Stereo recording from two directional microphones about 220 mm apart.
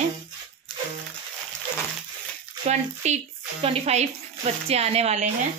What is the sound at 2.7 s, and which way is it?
A woman's voice, 30° right (ahead or behind).